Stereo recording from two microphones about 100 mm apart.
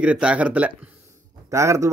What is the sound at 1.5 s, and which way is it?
Speech, 30° right (ahead or behind).